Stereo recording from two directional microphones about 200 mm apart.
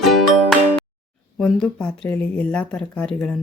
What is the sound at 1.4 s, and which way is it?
Speech, 5° left (ahead or behind).